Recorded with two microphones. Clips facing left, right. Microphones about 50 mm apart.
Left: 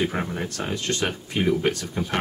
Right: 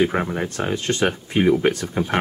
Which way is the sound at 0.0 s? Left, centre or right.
Right.